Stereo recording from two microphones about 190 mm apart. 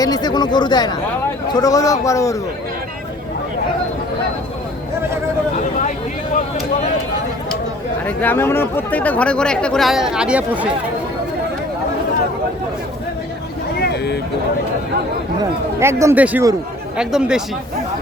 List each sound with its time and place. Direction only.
0.0 s a man's voice: 20° left (ahead or behind)
8.0 s speech: 10° left (ahead or behind); by 10.7 s 5° right (ahead or behind)
13.7 s vehicle: 60° left (ahead or behind)
15.8 s a man's voice: 15° right (ahead or behind)